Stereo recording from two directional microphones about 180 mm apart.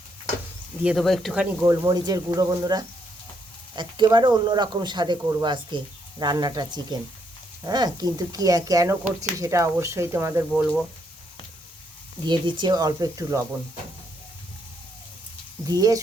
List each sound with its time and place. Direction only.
0.9 s speech: centre (ahead or behind)
1.6 s speech: 15° right (ahead or behind)
12.2 s speech: 25° right (ahead or behind)
15.6 s speech: 20° right (ahead or behind)